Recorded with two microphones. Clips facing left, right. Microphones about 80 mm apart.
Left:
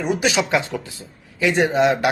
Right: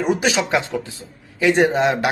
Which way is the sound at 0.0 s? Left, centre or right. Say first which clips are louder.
Right 2 dB; right.